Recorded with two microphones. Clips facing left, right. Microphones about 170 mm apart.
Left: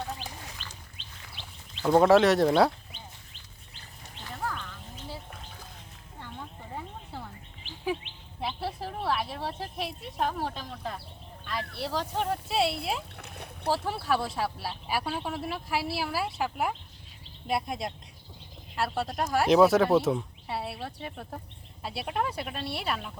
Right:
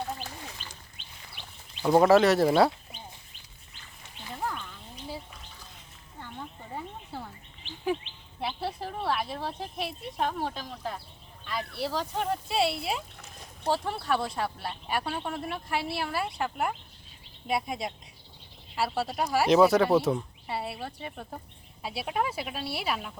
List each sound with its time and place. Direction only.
1.8 s speech: 5° right (ahead or behind)
4.4 s bird: 15° right (ahead or behind)
6.7 s a sound: 5° right (ahead or behind)
8.4 s speech: centre (ahead or behind)
13.1 s a sound: 65° left (ahead or behind)
13.7 s speech: centre (ahead or behind)